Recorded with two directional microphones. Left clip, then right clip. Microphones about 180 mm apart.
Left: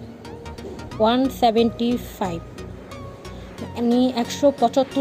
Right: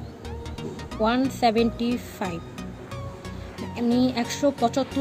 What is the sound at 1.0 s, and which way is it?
Speech, 15° left (ahead or behind).